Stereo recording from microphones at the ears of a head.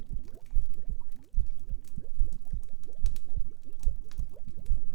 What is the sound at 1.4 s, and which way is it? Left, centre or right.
Boiling, right.